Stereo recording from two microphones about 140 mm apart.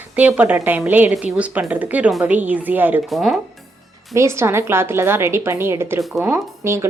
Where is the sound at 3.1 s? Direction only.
Centre (ahead or behind).